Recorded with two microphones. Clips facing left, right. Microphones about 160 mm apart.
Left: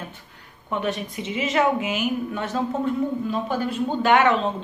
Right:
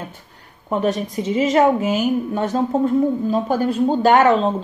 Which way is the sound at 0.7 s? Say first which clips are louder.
Right 6 dB; 40° right (ahead or behind).